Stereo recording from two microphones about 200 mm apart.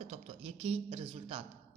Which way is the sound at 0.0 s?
35° right (ahead or behind).